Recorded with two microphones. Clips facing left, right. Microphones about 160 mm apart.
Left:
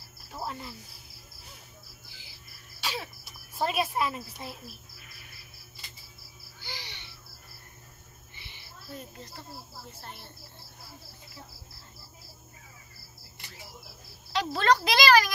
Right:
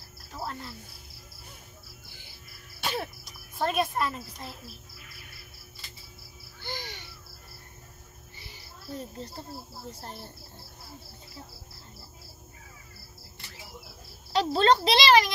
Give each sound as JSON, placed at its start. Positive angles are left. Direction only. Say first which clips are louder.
{"t": 0.3, "sound": "cricket", "louder": "even", "side_deg": 5}
{"t": 2.8, "sound": "music", "louder": "right 4 dB", "side_deg": -55}
{"t": 3.3, "sound": "speech", "louder": "left 1 dB", "side_deg": 5}
{"t": 6.6, "sound": "owl", "louder": "right 6 dB", "side_deg": -45}
{"t": 8.4, "sound": "music", "louder": "right 2 dB", "side_deg": -40}
{"t": 9.8, "sound": "speech", "louder": "right 5 dB", "side_deg": -35}
{"t": 14.3, "sound": "a child's voice", "louder": "right 3 dB", "side_deg": -30}